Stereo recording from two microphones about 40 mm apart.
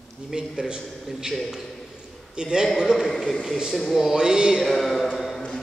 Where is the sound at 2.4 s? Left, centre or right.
Right.